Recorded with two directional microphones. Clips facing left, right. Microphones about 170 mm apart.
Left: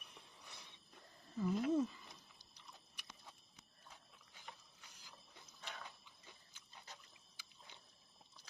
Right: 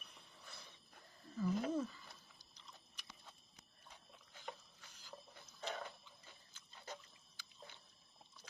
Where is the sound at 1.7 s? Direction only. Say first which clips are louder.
Left 4 dB; 20° left (ahead or behind).